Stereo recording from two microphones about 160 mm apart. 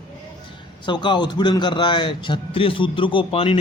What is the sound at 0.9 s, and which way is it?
A man's voice, 30° left (ahead or behind).